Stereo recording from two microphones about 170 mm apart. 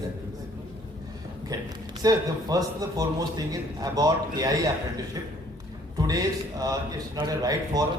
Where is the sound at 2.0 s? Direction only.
20° right (ahead or behind).